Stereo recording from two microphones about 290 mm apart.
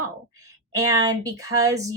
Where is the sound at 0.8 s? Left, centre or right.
Right.